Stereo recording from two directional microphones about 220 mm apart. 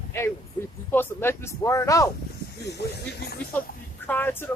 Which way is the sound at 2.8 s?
50° left (ahead or behind).